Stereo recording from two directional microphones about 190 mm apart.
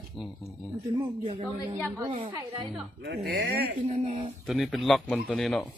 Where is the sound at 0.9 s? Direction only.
25° right (ahead or behind).